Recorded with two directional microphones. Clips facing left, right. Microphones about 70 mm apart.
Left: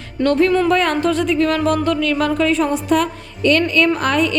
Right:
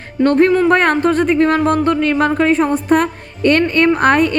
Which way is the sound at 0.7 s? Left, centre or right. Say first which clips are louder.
Right 3 dB; right.